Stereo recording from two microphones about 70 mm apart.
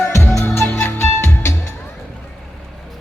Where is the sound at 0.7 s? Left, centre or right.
Left.